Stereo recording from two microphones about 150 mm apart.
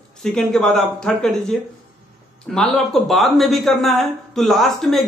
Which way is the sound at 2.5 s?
Centre (ahead or behind).